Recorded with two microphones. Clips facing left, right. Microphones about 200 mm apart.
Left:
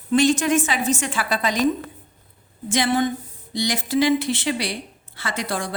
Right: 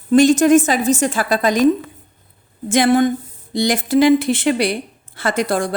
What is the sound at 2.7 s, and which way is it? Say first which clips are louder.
Speech: right 7 dB; 50° right (ahead or behind).